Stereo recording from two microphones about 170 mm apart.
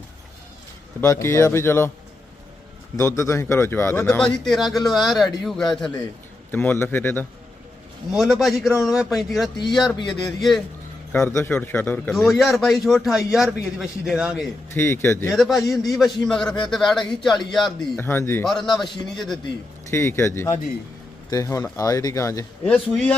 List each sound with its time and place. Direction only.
1.0 s a man's voice: 15° left (ahead or behind)
2.9 s a man's voice: 20° left (ahead or behind)
8.1 s a man's voice: centre (ahead or behind)
11.1 s a man's voice: 15° left (ahead or behind)
12.1 s a man's voice: centre (ahead or behind)
14.7 s a man's voice: 15° left (ahead or behind)
15.3 s a man's voice: centre (ahead or behind)
18.0 s a man's voice: 15° left (ahead or behind)
18.4 s a man's voice: 5° left (ahead or behind)
19.9 s a man's voice: 15° left (ahead or behind)
22.6 s a man's voice: 10° left (ahead or behind)